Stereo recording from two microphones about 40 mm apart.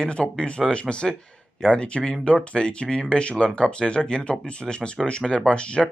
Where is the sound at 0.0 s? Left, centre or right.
Left.